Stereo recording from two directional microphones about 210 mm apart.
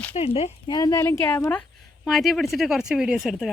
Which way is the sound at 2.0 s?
Centre (ahead or behind).